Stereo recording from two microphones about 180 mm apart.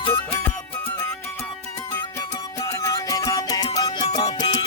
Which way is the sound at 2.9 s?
20° left (ahead or behind).